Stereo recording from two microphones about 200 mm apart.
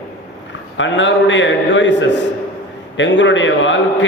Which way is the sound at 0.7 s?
70° left (ahead or behind).